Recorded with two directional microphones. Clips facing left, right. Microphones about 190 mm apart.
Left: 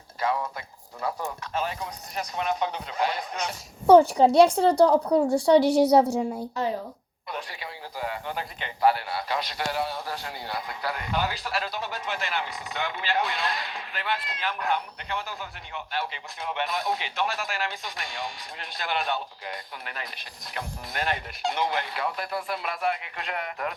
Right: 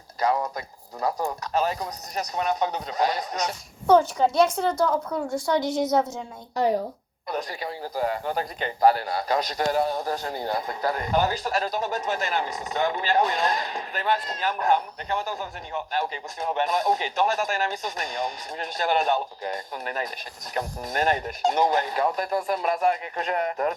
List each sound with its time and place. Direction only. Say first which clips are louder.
0.2 s a sound: right 3 dB; 40° right (ahead or behind)
1.0 s speech: right 4 dB; 40° right (ahead or behind)
4.4 s a woman's voice: left 5 dB; 30° left (ahead or behind)
7.3 s a man's voice: right 6 dB; 40° right (ahead or behind)